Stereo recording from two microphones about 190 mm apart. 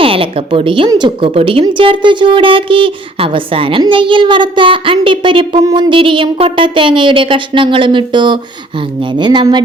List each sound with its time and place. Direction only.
0.0 s a woman's voice: 30° right (ahead or behind)